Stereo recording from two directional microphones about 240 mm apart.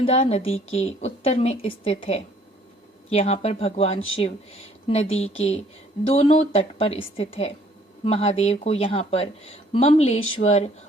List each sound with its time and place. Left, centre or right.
0.0 s a woman's voice: left